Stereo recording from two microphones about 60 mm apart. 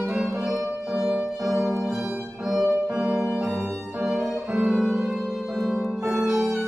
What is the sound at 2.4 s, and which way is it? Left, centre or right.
Violin, centre.